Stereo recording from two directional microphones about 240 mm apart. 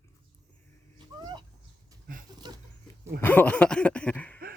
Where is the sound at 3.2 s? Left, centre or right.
Centre.